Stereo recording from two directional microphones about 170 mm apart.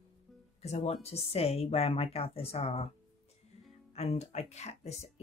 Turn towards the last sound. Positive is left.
turn(degrees=40)  # may be behind; listen again after turning